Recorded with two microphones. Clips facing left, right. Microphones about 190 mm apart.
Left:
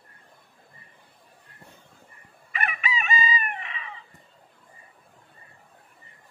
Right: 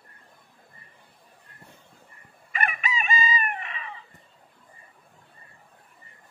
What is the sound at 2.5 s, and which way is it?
Chicken, 45° right (ahead or behind).